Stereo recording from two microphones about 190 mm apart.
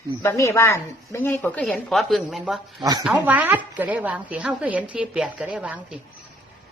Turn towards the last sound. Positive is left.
turn(degrees=-5)  # may be behind; listen again after turning